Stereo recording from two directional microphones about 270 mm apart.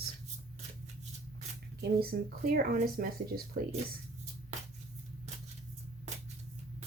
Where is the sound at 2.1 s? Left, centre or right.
Right.